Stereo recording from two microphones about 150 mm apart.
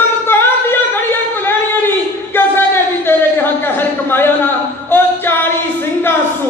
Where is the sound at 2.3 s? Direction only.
15° left (ahead or behind).